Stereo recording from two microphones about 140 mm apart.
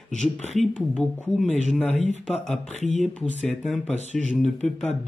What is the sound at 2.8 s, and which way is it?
Speech, 55° left (ahead or behind).